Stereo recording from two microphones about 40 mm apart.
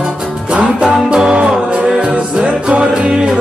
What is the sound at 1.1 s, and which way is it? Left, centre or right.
Music, right.